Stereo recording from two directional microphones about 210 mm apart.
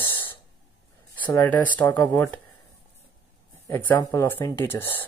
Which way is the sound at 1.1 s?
10° left (ahead or behind).